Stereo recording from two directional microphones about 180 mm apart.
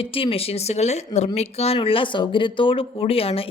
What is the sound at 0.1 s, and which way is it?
A woman's voice, 30° left (ahead or behind).